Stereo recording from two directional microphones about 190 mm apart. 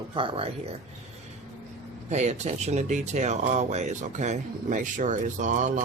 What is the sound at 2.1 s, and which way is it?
Speech, 35° right (ahead or behind).